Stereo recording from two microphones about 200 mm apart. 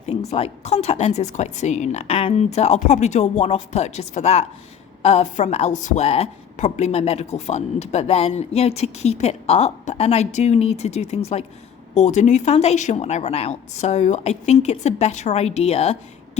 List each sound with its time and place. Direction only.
0.0 s a woman's voice: 35° left (ahead or behind)